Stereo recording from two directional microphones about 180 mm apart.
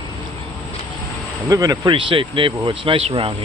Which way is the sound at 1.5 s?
20° right (ahead or behind).